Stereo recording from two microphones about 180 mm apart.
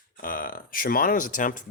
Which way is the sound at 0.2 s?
50° left (ahead or behind).